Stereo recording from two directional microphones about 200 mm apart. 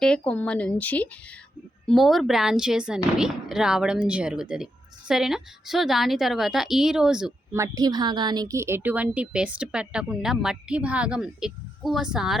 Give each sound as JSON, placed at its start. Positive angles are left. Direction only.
{"t": 0.0, "sound": "speech", "side_deg": 5}
{"t": 7.5, "sound": "speech", "side_deg": -15}